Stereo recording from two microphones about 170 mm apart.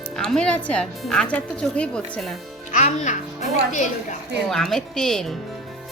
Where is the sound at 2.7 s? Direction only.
45° left (ahead or behind).